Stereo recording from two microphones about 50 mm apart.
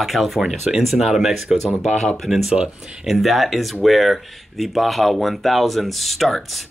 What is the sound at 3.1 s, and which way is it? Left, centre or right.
Speech, centre.